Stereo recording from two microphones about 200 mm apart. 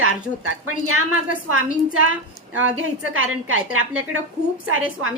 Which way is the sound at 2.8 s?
90° right.